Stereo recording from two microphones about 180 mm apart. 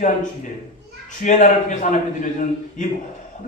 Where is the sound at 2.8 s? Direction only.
45° left (ahead or behind).